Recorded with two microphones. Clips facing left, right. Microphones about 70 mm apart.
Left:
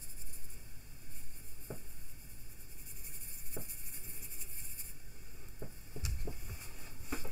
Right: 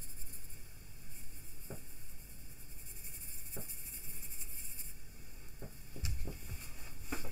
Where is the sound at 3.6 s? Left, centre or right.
Centre.